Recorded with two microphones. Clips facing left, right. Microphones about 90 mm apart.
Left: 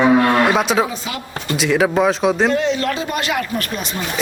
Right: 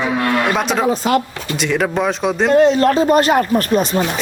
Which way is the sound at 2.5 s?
40° right (ahead or behind).